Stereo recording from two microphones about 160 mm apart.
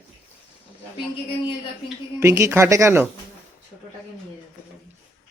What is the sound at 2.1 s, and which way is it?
Speech, 15° right (ahead or behind).